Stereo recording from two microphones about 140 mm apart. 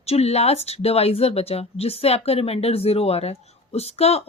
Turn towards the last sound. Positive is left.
turn(degrees=45)  # may be behind; listen again after turning